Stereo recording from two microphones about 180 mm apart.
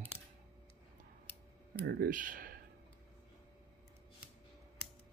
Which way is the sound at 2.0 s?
50° right (ahead or behind).